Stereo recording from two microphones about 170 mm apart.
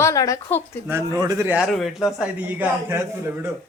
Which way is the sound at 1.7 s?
Centre (ahead or behind).